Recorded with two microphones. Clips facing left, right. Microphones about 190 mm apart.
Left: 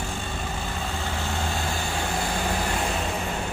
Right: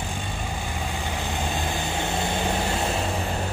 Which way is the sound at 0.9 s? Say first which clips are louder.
Right 1 dB; 15° right (ahead or behind).